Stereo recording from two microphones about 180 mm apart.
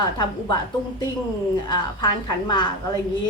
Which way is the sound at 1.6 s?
25° left (ahead or behind).